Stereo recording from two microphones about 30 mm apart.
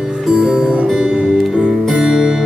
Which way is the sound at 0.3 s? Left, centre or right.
Right.